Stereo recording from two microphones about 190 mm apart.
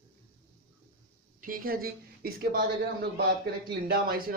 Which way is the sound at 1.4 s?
50° right (ahead or behind).